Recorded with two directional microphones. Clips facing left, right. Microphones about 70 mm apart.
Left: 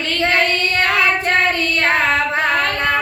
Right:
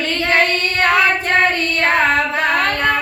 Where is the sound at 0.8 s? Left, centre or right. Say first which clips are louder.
Right 4 dB; right.